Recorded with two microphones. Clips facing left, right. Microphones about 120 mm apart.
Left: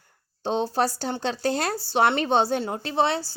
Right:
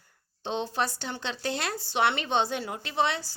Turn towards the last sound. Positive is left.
turn(degrees=35)  # may be behind; listen again after turning